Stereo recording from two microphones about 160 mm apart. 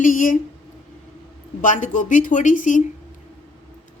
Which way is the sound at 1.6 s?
50° left (ahead or behind).